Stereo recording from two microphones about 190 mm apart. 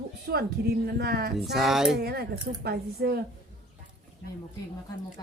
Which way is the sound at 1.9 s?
55° right (ahead or behind).